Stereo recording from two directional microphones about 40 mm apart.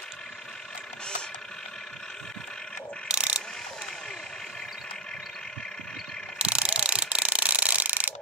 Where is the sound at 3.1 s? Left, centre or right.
Right.